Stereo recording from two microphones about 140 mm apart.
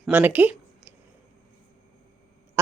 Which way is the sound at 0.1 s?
10° right (ahead or behind).